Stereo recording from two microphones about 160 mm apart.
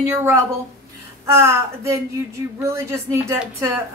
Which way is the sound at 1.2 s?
15° right (ahead or behind).